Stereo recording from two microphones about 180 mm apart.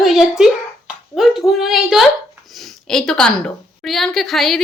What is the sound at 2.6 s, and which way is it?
A woman's voice, centre (ahead or behind).